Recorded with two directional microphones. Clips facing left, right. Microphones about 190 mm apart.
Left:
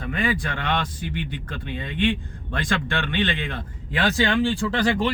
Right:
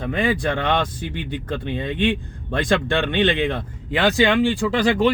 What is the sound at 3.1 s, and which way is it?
Speech, 20° right (ahead or behind).